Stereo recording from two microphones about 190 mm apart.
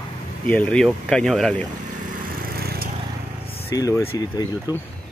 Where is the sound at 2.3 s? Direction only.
55° right (ahead or behind).